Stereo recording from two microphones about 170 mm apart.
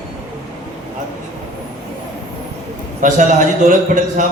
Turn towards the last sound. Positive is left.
turn(degrees=-50)  # may be behind; listen again after turning